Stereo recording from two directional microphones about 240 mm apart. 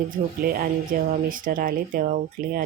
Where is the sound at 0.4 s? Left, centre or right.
Right.